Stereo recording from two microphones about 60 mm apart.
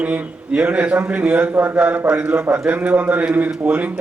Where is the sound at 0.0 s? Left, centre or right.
Right.